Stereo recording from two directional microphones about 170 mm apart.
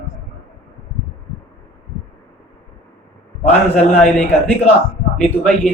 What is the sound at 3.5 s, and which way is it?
Speech, 5° left (ahead or behind).